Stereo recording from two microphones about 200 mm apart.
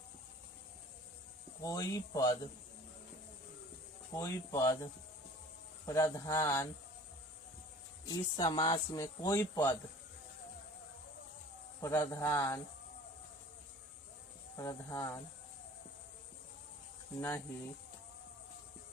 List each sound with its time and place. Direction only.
1.6 s speech: 15° left (ahead or behind)
4.1 s speech: 15° left (ahead or behind)
8.0 s speech: 20° left (ahead or behind)
11.8 s speech: 15° left (ahead or behind)
14.5 s speech: 15° left (ahead or behind)
17.2 s speech: 15° left (ahead or behind)